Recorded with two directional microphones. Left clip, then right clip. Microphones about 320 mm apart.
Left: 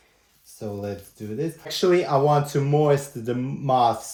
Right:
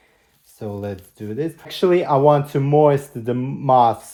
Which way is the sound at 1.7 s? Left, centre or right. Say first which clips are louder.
Right 3 dB; centre.